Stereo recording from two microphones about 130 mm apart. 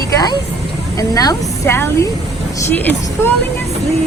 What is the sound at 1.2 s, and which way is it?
A woman's voice, 25° left (ahead or behind).